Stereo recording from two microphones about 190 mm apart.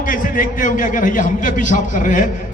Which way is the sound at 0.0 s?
45° left (ahead or behind).